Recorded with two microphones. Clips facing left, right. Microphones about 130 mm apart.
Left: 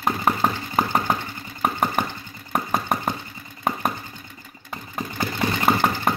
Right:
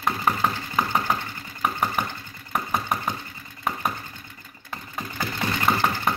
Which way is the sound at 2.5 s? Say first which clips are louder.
Left 3 dB; 45° left (ahead or behind).